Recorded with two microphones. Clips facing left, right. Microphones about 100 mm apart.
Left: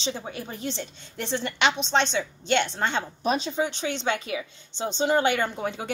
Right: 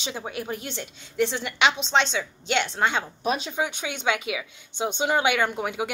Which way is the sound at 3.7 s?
10° right (ahead or behind).